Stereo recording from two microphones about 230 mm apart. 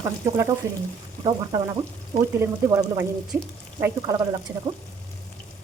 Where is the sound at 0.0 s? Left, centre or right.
Centre.